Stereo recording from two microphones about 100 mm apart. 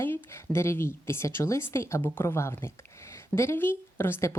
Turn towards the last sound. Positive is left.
turn(degrees=25)  # may be behind; listen again after turning